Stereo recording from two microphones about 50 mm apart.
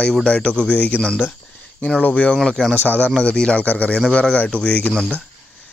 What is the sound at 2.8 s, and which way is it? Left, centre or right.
Speech, left.